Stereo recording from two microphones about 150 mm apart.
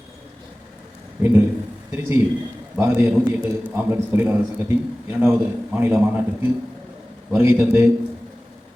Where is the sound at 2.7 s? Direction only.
15° right (ahead or behind).